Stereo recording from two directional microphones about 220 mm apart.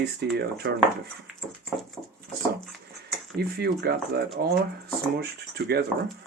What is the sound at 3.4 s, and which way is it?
Speech, 45° right (ahead or behind).